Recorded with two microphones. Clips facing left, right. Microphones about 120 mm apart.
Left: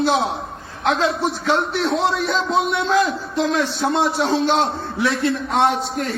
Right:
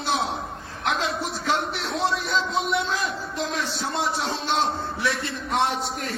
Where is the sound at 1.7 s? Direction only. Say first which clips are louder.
Left 6 dB; 65° left (ahead or behind).